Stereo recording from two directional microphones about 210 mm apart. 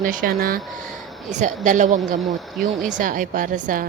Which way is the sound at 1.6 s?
35° right (ahead or behind).